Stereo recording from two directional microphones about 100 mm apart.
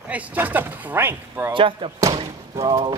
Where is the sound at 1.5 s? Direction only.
60° right (ahead or behind).